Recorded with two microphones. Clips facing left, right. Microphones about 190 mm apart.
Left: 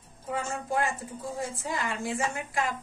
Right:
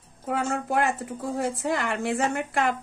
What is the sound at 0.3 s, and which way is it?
A woman's voice, 65° right (ahead or behind).